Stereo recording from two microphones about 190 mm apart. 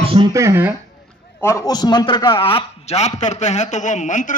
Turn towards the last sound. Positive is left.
turn(degrees=40)  # may be behind; listen again after turning